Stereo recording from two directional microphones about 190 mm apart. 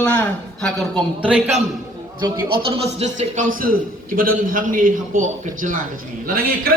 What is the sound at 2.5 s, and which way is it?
A man's voice, 30° right (ahead or behind).